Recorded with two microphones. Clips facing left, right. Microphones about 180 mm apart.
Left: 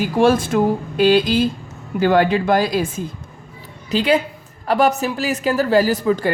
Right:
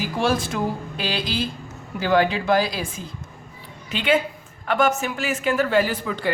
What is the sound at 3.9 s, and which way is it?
A woman's voice, 35° left (ahead or behind).